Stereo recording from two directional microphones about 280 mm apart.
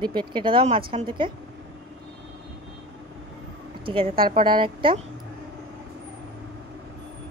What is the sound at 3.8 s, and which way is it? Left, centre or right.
A woman's voice, centre.